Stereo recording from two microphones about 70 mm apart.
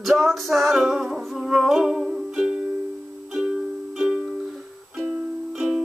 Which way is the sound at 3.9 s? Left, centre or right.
Centre.